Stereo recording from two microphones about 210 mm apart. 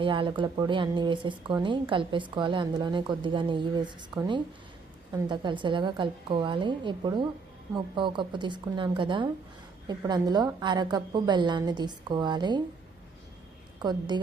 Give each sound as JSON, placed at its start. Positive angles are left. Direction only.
{"t": 0.0, "sound": "speech", "side_deg": -25}
{"t": 13.8, "sound": "speech", "side_deg": -20}